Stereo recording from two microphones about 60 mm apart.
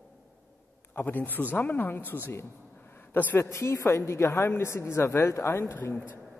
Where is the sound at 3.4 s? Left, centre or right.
Left.